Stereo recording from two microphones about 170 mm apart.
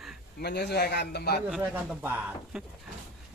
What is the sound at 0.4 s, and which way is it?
A man's voice, 75° left (ahead or behind).